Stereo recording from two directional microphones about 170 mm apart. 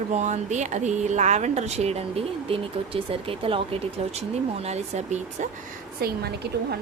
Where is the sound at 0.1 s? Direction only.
45° right (ahead or behind).